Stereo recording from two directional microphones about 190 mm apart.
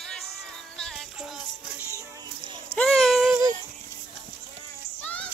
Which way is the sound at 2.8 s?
Centre (ahead or behind).